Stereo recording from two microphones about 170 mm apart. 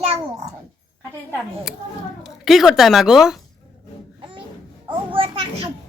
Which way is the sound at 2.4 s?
Centre (ahead or behind).